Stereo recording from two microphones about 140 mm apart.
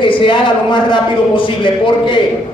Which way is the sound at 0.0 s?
35° left (ahead or behind).